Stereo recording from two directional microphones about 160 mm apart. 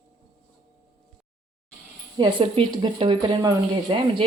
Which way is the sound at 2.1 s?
30° right (ahead or behind).